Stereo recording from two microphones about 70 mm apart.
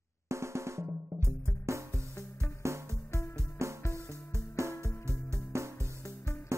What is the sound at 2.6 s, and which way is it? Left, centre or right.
Music, right.